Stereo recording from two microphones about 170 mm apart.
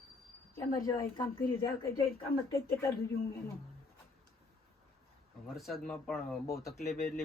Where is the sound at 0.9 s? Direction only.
25° left (ahead or behind).